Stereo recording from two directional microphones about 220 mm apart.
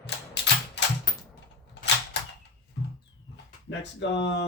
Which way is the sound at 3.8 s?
50° left (ahead or behind).